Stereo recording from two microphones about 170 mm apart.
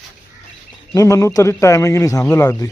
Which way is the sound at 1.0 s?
20° left (ahead or behind).